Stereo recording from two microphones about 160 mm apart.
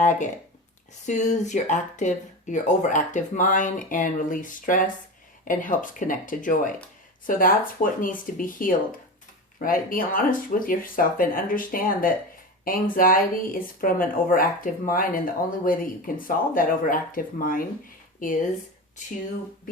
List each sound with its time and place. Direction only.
0.0 s speech: 50° left (ahead or behind)